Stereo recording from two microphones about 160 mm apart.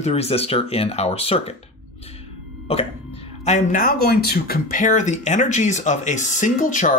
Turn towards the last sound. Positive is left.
turn(degrees=55)  # may be behind; listen again after turning